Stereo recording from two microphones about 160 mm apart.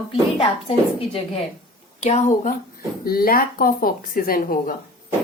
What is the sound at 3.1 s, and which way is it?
Speech, 65° left (ahead or behind).